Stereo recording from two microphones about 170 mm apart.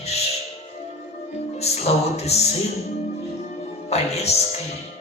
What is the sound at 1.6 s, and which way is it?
Speech, 40° left (ahead or behind).